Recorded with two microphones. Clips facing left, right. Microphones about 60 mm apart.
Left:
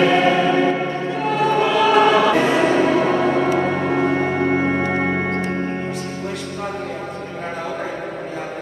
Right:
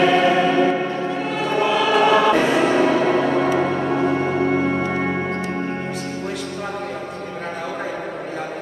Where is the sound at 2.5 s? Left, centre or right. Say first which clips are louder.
Left 1 dB; centre.